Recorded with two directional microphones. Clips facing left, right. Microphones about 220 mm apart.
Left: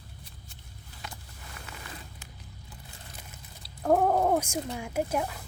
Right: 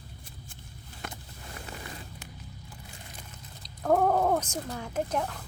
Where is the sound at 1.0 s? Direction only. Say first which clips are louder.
Right 3 dB; 50° right (ahead or behind).